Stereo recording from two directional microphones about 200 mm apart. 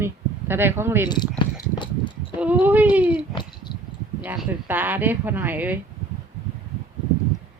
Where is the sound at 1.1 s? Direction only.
20° left (ahead or behind).